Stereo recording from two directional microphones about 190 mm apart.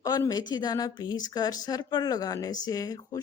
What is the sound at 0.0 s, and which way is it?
A woman's voice, 20° left (ahead or behind).